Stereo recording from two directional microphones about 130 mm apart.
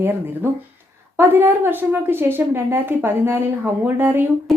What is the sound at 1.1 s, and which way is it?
A woman's voice, 15° right (ahead or behind).